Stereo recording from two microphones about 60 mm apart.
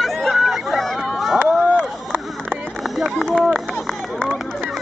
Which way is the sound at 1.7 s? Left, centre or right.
Right.